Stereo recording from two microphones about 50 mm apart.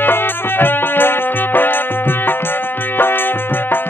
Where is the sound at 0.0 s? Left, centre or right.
Left.